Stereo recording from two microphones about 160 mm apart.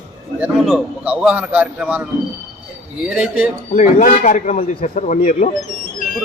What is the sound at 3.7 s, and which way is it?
A man's voice, 50° left (ahead or behind).